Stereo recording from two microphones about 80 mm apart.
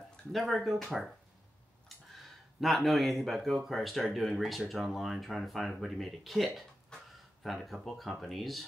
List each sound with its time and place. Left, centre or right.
0.3 s speech: centre
2.6 s speech: centre